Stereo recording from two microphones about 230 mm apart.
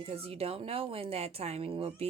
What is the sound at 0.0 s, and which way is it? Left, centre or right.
Speech, right.